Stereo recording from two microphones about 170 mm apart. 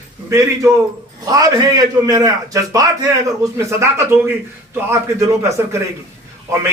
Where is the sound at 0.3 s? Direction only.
15° right (ahead or behind).